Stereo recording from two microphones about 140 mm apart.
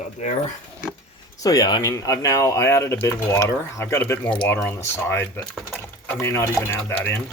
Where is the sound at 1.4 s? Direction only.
25° left (ahead or behind).